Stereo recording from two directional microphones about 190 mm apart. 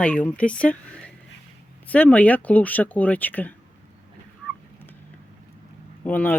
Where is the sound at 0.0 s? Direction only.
5° left (ahead or behind).